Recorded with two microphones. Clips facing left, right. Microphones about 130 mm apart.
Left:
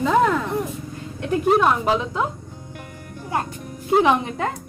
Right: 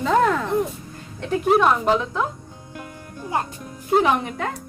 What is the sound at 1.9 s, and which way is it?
Speech, 10° left (ahead or behind).